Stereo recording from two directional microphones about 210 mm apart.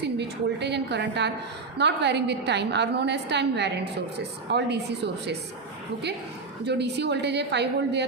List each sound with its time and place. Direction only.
0.0 s a woman's voice: 55° right (ahead or behind)
6.7 s a woman's voice: 55° right (ahead or behind)